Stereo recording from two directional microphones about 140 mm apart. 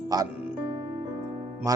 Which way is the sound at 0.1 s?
25° right (ahead or behind).